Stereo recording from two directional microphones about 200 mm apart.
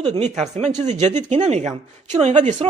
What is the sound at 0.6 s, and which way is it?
Speech, 35° right (ahead or behind).